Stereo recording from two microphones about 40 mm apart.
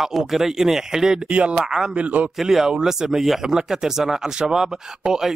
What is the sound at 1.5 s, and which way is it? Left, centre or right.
Speech, centre.